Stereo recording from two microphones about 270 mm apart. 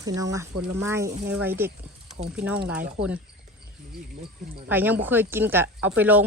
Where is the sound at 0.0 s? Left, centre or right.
Centre.